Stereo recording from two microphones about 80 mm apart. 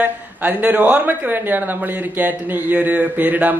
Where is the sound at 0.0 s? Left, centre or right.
Right.